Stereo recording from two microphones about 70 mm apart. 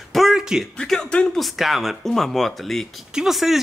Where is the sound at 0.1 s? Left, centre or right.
Centre.